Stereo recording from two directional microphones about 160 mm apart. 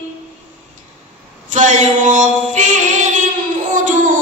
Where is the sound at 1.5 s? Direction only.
50° right (ahead or behind).